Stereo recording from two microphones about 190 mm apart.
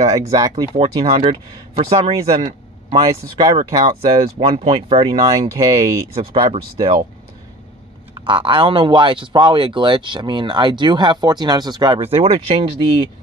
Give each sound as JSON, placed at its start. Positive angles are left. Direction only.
{"t": 0.0, "sound": "speech", "side_deg": -15}
{"t": 0.7, "sound": "speech", "side_deg": -30}
{"t": 2.9, "sound": "speech", "side_deg": -20}
{"t": 3.5, "sound": "speech", "side_deg": -30}
{"t": 6.5, "sound": "speech", "side_deg": -30}
{"t": 8.1, "sound": "speech", "side_deg": -25}